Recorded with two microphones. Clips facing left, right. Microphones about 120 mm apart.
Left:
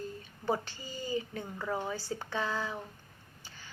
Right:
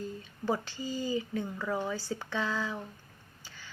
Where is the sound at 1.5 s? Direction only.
25° left (ahead or behind).